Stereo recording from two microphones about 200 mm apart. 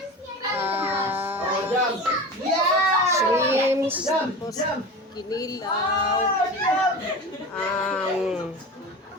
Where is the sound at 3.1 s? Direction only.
15° right (ahead or behind).